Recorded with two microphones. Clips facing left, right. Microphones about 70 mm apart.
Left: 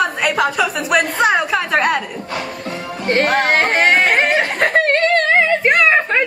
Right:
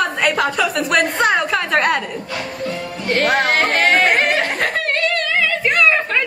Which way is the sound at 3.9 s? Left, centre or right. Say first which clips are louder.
Left 1 dB; centre.